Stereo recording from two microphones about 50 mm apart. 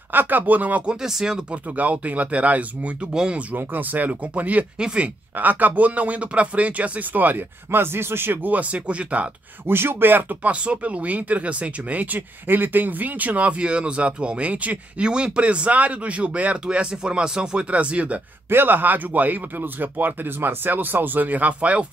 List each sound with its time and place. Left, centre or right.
0.1 s speech: right
0.8 s speech: centre
1.5 s speech: right
3.1 s speech: centre
3.5 s speech: right
4.7 s speech: centre
5.0 s speech: right
7.8 s speech: right
9.7 s speech: right
10.4 s speech: right
18.5 s speech: right